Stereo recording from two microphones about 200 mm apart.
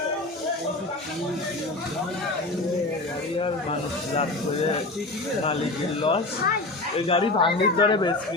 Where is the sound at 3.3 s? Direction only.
25° left (ahead or behind).